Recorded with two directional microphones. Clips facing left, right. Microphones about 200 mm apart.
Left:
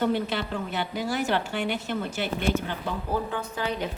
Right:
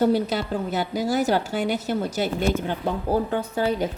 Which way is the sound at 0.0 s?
40° right (ahead or behind).